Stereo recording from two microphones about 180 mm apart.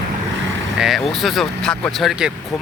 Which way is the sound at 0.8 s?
Centre (ahead or behind).